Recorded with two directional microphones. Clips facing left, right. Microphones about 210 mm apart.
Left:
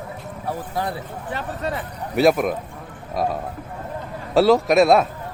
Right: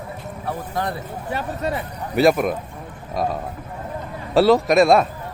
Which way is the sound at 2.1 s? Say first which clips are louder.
Even; centre (ahead or behind).